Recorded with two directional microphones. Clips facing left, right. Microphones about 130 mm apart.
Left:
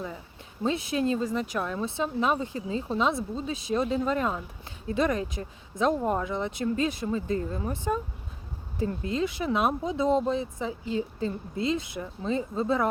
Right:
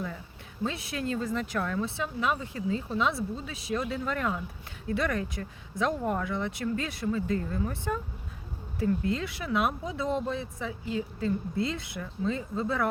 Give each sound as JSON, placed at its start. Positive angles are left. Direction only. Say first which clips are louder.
{"t": 0.6, "sound": "speech", "louder": "left 6 dB", "side_deg": 20}